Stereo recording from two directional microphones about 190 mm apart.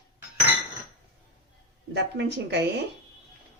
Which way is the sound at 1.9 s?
60° right (ahead or behind).